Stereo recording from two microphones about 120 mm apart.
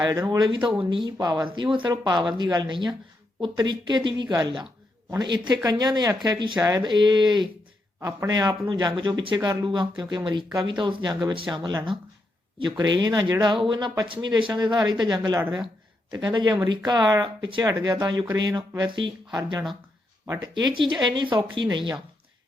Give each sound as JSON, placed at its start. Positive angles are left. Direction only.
{"t": 0.0, "sound": "speech", "side_deg": -30}
{"t": 20.2, "sound": "speech", "side_deg": -30}
{"t": 20.7, "sound": "speech", "side_deg": -40}